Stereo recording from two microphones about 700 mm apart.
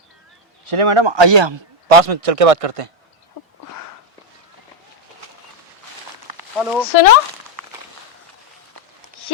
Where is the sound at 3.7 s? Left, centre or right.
Left.